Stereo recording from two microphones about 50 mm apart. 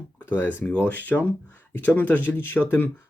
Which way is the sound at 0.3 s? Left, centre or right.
Left.